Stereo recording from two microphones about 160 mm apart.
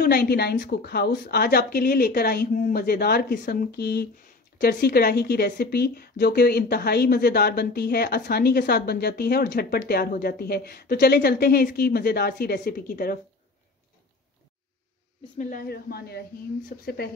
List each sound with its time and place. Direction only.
0.0 s speech: 80° left
15.3 s speech: 65° left (ahead or behind)